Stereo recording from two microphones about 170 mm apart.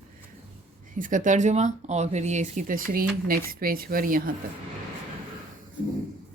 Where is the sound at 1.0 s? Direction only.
50° right (ahead or behind).